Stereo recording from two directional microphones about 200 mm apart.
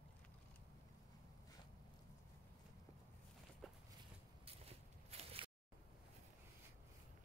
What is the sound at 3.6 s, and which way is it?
Walk, centre (ahead or behind).